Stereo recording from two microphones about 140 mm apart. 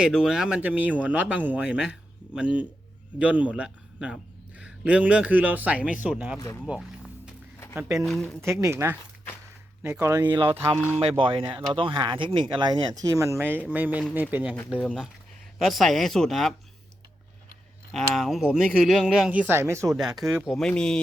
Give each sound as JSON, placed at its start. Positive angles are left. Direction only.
{"t": 0.1, "sound": "speech", "side_deg": -5}
{"t": 8.6, "sound": "speech", "side_deg": -20}
{"t": 11.2, "sound": "speech", "side_deg": -40}
{"t": 14.8, "sound": "speech", "side_deg": 5}
{"t": 17.9, "sound": "speech", "side_deg": 0}
{"t": 20.0, "sound": "speech", "side_deg": 0}